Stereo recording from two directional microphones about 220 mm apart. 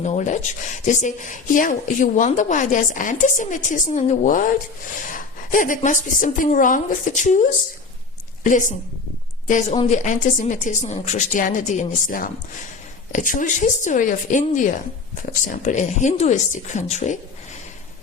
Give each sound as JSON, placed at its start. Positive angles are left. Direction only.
{"t": 0.0, "sound": "speech", "side_deg": 30}
{"t": 8.4, "sound": "speech", "side_deg": 35}